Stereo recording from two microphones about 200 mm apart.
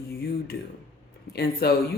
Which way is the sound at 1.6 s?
50° left (ahead or behind).